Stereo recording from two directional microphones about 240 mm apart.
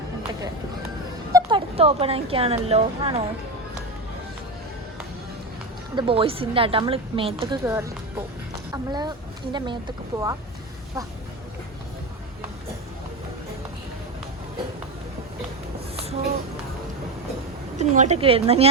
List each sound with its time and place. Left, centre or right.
1.3 s speech: centre
6.0 s a woman's voice: right
7.6 s speech: centre
17.7 s a woman's voice: right